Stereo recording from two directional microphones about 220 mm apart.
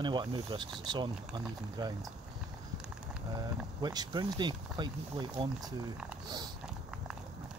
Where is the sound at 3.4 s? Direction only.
20° right (ahead or behind).